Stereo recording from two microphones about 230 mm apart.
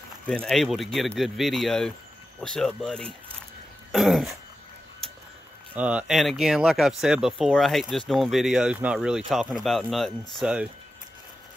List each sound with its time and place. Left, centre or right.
0.3 s speech: centre
5.8 s speech: centre